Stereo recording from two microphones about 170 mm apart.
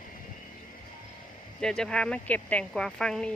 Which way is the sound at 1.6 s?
5° left (ahead or behind).